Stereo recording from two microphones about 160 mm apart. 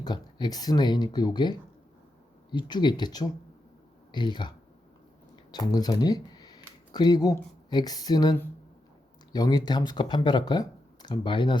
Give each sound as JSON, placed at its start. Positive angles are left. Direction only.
{"t": 0.0, "sound": "speech", "side_deg": 25}